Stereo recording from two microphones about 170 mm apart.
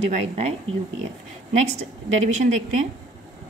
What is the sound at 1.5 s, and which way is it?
Speech, 40° right (ahead or behind).